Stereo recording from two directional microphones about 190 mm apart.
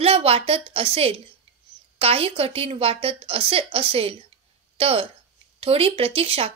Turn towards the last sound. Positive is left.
turn(degrees=-30)  # may be behind; listen again after turning